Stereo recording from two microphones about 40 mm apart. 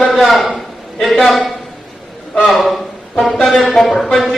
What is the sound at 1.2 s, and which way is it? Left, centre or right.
Speech, centre.